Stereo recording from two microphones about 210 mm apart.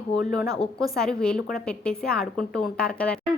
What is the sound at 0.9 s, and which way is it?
A woman's voice, 5° left (ahead or behind).